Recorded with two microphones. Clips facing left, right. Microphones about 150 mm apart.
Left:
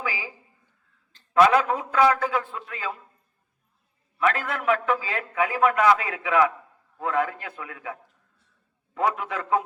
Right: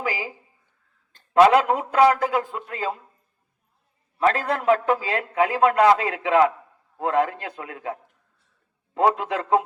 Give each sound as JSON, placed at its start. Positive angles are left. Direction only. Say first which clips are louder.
{"t": 1.4, "sound": "a man's voice", "louder": "right 3 dB", "side_deg": -30}
{"t": 4.2, "sound": "a man's voice", "louder": "right 4 dB", "side_deg": -30}
{"t": 9.0, "sound": "a man's voice", "louder": "right 5 dB", "side_deg": -30}